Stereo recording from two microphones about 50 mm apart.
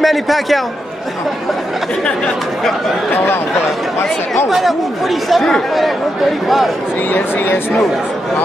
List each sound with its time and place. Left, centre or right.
0.0 s speech: centre
4.5 s speech: centre
7.1 s a woman's voice: left